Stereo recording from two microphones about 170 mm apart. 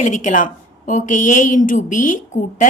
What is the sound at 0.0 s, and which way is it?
A woman's voice, 45° left (ahead or behind).